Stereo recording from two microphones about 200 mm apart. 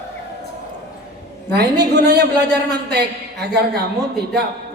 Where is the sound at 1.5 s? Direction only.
50° right (ahead or behind).